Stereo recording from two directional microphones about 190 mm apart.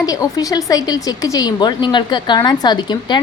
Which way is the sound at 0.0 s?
20° left (ahead or behind).